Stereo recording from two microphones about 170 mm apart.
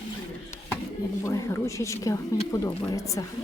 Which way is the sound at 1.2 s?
15° left (ahead or behind).